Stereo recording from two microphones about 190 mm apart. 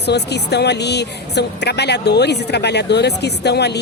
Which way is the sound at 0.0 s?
60° left (ahead or behind).